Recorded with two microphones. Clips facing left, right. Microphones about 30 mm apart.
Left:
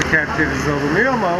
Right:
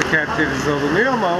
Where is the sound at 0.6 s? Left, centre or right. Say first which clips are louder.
Even; right.